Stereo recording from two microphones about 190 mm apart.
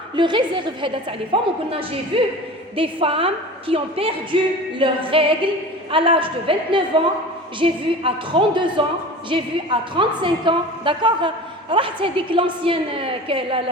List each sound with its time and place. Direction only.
0.2 s a woman's voice: 25° right (ahead or behind)